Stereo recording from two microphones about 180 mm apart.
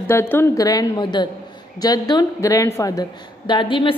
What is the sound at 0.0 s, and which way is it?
A woman's voice, 10° left (ahead or behind).